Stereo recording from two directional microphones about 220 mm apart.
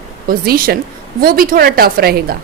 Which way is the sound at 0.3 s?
40° right (ahead or behind).